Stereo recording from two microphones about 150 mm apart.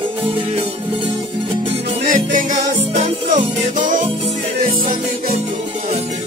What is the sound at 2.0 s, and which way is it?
Music, 60° right (ahead or behind).